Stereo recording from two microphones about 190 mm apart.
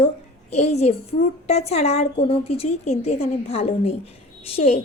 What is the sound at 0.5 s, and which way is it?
A woman's voice, 35° left (ahead or behind).